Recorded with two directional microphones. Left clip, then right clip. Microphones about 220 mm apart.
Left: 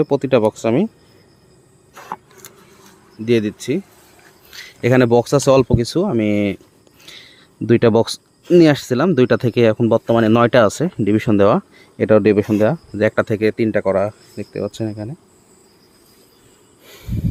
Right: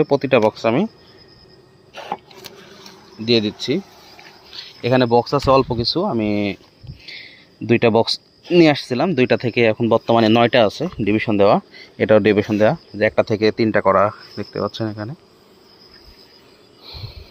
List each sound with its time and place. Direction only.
0.0 s speech: 20° left (ahead or behind)
3.2 s speech: 25° left (ahead or behind)
4.5 s speech: 45° left (ahead or behind)
7.7 s speech: 25° left (ahead or behind)
10.1 s speech: 20° left (ahead or behind)